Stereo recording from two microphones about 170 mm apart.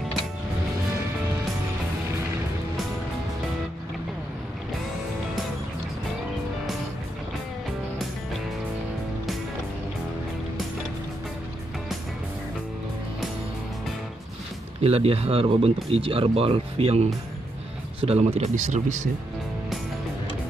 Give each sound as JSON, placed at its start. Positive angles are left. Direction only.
{"t": 14.8, "sound": "speech", "side_deg": -35}
{"t": 18.0, "sound": "speech", "side_deg": -35}